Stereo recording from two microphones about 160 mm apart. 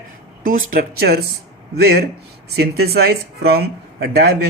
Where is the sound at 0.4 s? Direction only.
70° right (ahead or behind).